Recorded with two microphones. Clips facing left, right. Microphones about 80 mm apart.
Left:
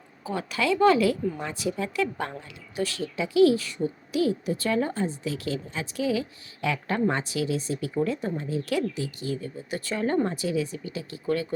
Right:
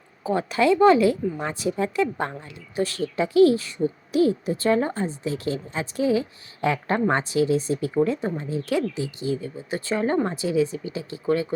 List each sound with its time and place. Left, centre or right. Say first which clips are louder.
0.3 s speech: right 6 dB; right